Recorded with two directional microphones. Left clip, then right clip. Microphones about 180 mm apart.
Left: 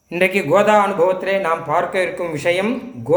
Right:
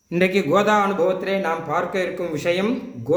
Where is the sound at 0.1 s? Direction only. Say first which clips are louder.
Left 3 dB; 25° right (ahead or behind).